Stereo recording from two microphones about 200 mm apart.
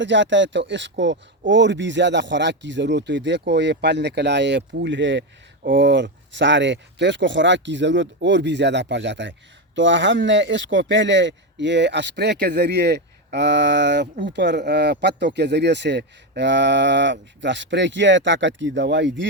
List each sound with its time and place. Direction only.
0.0 s speech: 65° right (ahead or behind)